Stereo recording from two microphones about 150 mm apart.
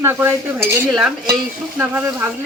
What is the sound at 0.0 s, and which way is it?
Stir, 15° right (ahead or behind).